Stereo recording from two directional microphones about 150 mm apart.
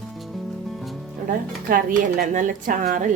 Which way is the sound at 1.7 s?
65° right (ahead or behind).